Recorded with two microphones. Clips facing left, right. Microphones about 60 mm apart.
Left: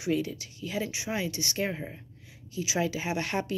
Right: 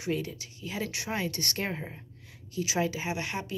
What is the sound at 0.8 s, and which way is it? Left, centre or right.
Speech, right.